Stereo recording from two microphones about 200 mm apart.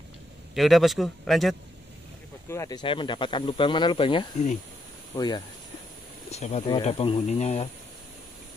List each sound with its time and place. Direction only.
0.6 s speech: centre (ahead or behind)
2.5 s speech: 15° left (ahead or behind)
2.8 s speech: 25° left (ahead or behind)
6.3 s speech: 35° left (ahead or behind)